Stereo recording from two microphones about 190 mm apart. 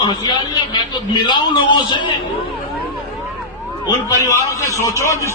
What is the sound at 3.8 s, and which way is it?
A man's voice, 20° left (ahead or behind).